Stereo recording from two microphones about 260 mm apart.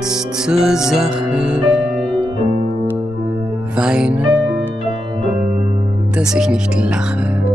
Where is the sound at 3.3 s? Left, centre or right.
Centre.